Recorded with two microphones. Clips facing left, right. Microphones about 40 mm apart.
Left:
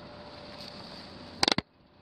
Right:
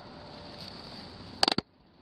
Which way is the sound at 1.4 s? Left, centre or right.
Left.